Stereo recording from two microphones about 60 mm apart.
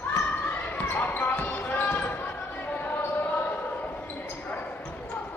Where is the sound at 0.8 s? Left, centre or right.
Left.